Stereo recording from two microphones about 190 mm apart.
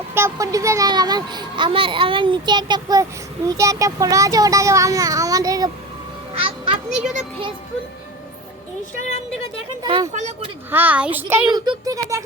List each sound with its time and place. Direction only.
0.1 s a child's voice: 15° right (ahead or behind)
6.3 s children playing: 30° right (ahead or behind)
9.8 s a child's voice: 25° right (ahead or behind)
10.1 s speech: 40° right (ahead or behind)
10.7 s speech: 10° right (ahead or behind)
11.5 s speech: 20° right (ahead or behind)